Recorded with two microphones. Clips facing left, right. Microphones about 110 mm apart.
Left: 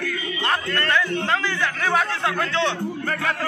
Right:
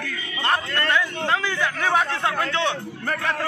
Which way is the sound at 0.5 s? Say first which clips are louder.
Right 1 dB; 15° right (ahead or behind).